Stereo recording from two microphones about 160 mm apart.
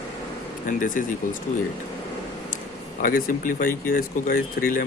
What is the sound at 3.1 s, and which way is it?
Speech, 60° left (ahead or behind).